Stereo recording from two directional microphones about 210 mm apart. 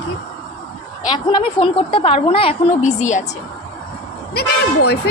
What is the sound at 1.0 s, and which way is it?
A woman's voice, 20° left (ahead or behind).